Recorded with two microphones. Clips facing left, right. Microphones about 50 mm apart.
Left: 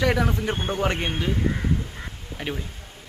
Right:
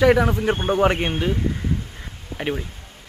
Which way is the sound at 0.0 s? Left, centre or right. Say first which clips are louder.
Right 6 dB; centre.